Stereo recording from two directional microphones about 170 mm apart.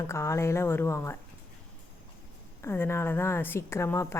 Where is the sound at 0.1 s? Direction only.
15° left (ahead or behind).